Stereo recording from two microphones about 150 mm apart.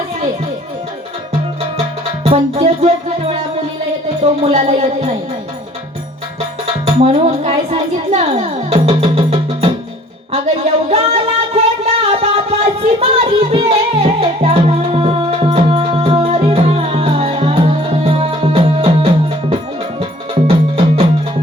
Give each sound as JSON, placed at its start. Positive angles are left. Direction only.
{"t": 2.2, "sound": "music", "side_deg": -45}
{"t": 6.8, "sound": "speech", "side_deg": -45}
{"t": 10.3, "sound": "a sound", "side_deg": -45}
{"t": 13.0, "sound": "music", "side_deg": -40}